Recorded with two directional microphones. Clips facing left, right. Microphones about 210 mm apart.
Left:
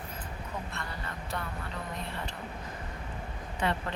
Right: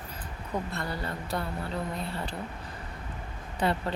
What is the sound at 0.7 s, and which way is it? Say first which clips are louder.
Speech: right 6 dB; 35° right (ahead or behind).